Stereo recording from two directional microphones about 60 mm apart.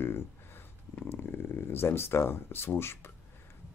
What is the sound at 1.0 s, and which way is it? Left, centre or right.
Speech, left.